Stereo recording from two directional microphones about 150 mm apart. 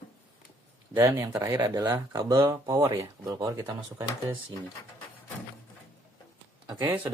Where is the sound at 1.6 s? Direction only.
25° right (ahead or behind).